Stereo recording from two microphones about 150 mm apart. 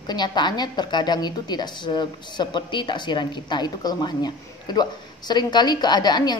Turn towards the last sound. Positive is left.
turn(degrees=30)  # may be behind; listen again after turning